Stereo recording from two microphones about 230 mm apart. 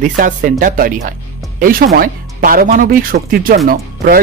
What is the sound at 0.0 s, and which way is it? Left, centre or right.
Speech, right.